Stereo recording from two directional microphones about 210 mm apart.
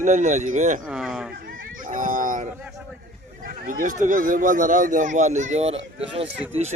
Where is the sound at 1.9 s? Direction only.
40° right (ahead or behind).